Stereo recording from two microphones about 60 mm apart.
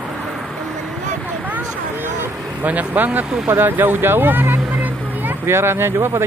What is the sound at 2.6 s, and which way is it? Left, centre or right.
Speech, right.